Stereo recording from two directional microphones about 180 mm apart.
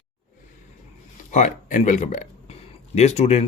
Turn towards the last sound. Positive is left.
turn(degrees=40)  # may be behind; listen again after turning